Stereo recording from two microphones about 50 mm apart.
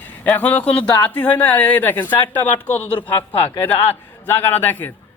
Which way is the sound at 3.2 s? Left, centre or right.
Left.